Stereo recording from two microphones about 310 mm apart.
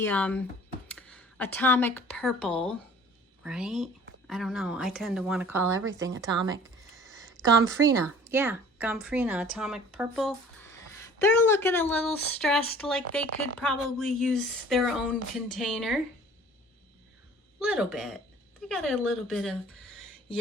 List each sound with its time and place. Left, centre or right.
0.0 s a woman's voice: centre
7.5 s speech: right
8.3 s a woman's voice: centre
17.7 s a woman's voice: centre